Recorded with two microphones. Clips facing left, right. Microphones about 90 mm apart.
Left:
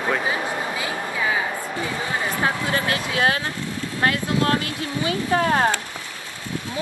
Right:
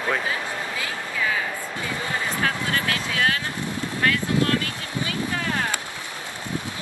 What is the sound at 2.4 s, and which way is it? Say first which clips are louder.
Speech: left 3 dB; 25° left (ahead or behind).